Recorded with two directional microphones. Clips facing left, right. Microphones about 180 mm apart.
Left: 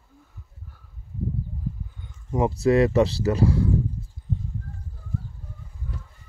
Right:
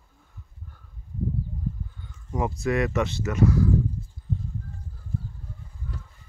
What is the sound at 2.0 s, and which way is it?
Speech, 25° left (ahead or behind).